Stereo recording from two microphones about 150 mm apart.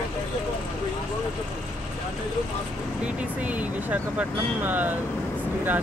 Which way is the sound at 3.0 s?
10° right (ahead or behind).